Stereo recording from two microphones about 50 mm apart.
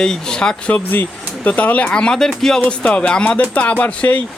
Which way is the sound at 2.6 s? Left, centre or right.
Left.